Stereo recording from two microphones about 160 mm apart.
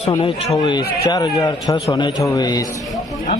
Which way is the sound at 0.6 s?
25° left (ahead or behind).